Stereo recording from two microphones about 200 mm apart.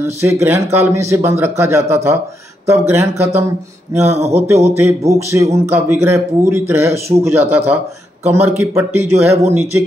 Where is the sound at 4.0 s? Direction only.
30° right (ahead or behind).